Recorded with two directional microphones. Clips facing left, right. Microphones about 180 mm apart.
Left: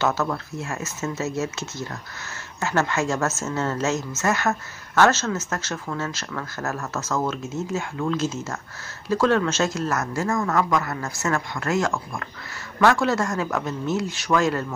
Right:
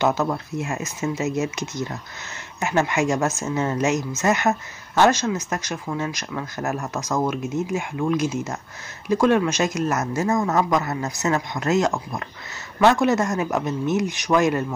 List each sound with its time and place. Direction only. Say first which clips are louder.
0.0 s speech: right 2 dB; 15° right (ahead or behind)